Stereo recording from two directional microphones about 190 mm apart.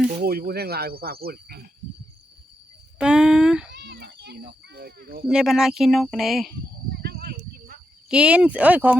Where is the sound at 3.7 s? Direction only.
65° right (ahead or behind).